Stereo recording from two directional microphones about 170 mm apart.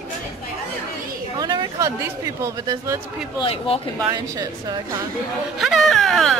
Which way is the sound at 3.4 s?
35° left (ahead or behind).